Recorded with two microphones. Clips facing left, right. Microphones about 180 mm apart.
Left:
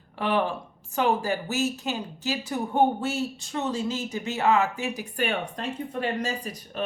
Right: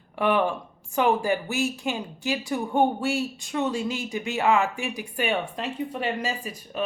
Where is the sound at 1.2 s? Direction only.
10° right (ahead or behind).